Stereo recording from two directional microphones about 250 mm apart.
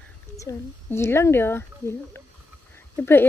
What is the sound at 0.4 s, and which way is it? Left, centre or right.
Speech, centre.